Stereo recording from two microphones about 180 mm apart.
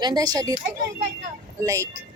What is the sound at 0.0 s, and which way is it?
Speech, 20° right (ahead or behind).